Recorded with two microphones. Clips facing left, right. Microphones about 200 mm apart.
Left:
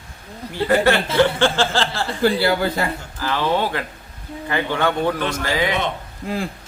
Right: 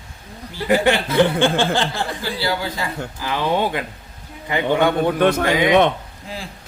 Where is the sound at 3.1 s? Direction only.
15° right (ahead or behind).